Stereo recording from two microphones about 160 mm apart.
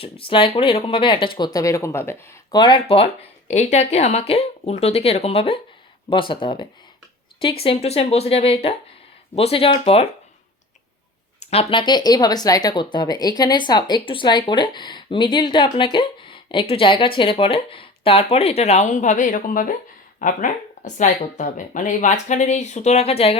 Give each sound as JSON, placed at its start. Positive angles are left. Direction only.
{"t": 0.0, "sound": "speech", "side_deg": 35}
{"t": 2.6, "sound": "speech", "side_deg": 30}
{"t": 11.5, "sound": "speech", "side_deg": 30}